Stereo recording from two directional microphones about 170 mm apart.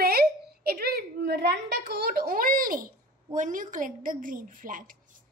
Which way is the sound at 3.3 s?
50° right (ahead or behind).